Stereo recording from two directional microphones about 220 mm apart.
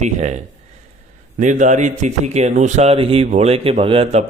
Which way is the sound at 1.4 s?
35° right (ahead or behind).